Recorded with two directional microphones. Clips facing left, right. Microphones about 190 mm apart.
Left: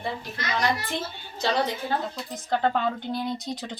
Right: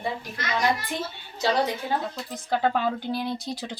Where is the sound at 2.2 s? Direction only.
5° right (ahead or behind).